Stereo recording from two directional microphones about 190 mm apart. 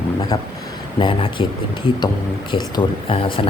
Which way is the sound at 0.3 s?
20° left (ahead or behind).